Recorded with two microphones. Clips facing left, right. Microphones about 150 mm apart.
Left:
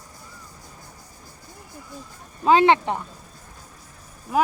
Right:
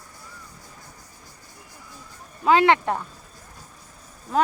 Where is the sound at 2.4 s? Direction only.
20° left (ahead or behind).